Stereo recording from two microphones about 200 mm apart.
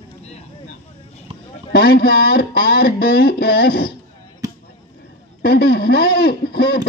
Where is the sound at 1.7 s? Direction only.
50° left (ahead or behind).